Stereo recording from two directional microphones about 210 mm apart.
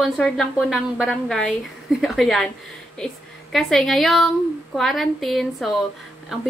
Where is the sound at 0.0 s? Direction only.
5° left (ahead or behind).